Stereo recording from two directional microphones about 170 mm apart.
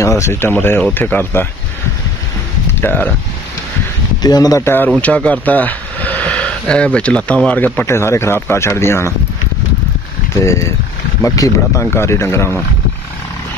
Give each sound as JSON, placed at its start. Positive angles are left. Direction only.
{"t": 0.0, "sound": "speech", "side_deg": 15}
{"t": 2.8, "sound": "speech", "side_deg": 10}
{"t": 4.2, "sound": "speech", "side_deg": 20}
{"t": 10.4, "sound": "speech", "side_deg": 15}